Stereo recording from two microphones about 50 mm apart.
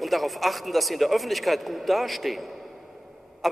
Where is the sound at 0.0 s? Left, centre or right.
Centre.